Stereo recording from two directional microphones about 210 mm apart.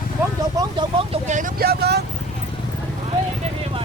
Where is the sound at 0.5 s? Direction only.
20° right (ahead or behind); by 2.0 s 50° right (ahead or behind).